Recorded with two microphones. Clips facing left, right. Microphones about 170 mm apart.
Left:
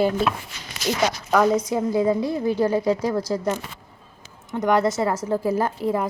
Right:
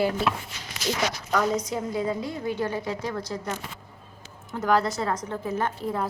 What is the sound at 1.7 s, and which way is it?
A woman's voice, 30° left (ahead or behind).